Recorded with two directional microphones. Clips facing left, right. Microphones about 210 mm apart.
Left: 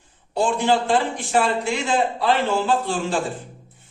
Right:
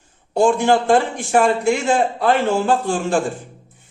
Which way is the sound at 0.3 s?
50° right (ahead or behind).